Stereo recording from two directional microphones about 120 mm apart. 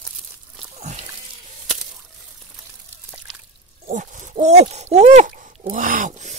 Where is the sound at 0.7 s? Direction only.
65° right (ahead or behind).